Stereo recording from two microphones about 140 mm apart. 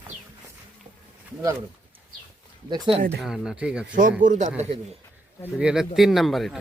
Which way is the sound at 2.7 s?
30° right (ahead or behind).